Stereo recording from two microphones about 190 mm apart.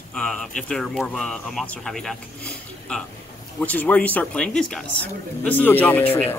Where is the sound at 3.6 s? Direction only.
10° left (ahead or behind).